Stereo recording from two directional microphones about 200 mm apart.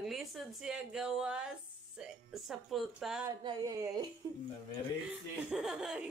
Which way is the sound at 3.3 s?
20° right (ahead or behind).